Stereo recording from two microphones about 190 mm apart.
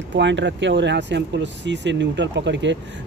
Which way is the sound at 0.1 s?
70° right (ahead or behind).